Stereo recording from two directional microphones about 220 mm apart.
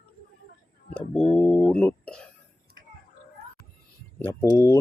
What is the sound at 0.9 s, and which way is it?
Speech, centre (ahead or behind).